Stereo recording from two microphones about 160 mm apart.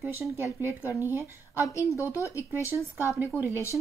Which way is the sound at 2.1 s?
15° right (ahead or behind).